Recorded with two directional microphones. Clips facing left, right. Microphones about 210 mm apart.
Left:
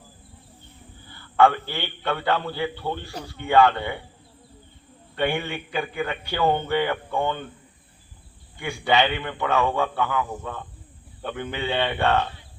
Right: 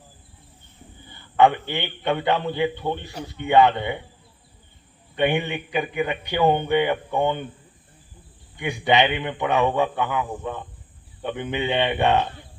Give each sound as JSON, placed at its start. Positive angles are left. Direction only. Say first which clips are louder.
{"t": 1.0, "sound": "a man's voice", "louder": "right 1 dB", "side_deg": -20}
{"t": 5.1, "sound": "speech", "louder": "right 3 dB", "side_deg": -20}
{"t": 8.5, "sound": "speech", "louder": "right 2 dB", "side_deg": -20}